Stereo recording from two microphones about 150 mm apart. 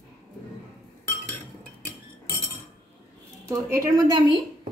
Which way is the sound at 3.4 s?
20° right (ahead or behind).